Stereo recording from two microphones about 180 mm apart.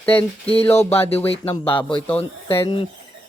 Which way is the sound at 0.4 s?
30° left (ahead or behind).